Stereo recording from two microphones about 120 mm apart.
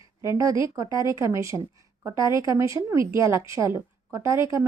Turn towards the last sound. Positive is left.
turn(degrees=-25)  # may be behind; listen again after turning